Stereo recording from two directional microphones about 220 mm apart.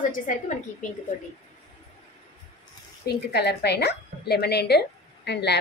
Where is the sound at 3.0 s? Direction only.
50° left (ahead or behind).